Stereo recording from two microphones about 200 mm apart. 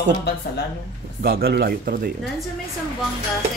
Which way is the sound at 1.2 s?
50° right (ahead or behind).